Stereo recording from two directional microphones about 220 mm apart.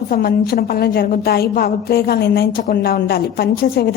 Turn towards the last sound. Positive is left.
turn(degrees=45)  # may be behind; listen again after turning